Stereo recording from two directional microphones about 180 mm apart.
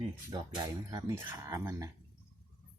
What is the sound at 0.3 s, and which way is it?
Speech, 20° right (ahead or behind).